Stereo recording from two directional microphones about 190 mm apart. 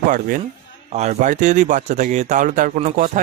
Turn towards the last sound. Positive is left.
turn(degrees=-40)  # may be behind; listen again after turning